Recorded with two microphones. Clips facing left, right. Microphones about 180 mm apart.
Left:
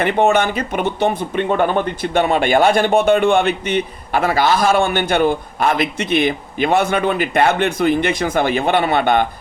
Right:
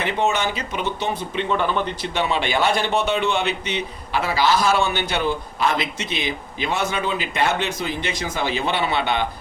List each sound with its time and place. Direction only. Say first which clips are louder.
0.0 s speech: left 7 dB; 55° left (ahead or behind)